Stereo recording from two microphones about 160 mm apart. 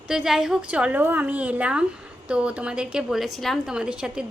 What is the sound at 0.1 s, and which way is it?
A woman's voice, 5° right (ahead or behind).